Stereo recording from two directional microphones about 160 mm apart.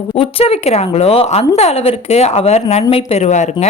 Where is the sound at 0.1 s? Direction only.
35° left (ahead or behind).